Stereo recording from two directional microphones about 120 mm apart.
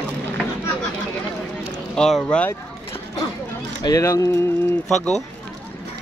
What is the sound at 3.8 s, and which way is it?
Speech, 30° left (ahead or behind).